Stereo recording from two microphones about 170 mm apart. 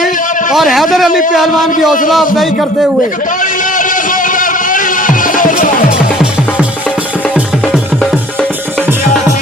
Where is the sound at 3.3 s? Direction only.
50° left (ahead or behind).